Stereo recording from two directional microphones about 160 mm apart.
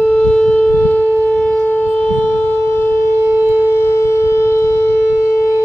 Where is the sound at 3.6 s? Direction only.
15° left (ahead or behind).